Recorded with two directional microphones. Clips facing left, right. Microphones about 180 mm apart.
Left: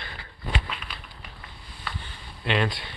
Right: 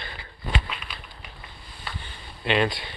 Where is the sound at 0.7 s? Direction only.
10° right (ahead or behind).